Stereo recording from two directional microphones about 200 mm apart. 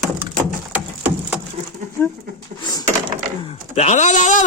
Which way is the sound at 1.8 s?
40° right (ahead or behind).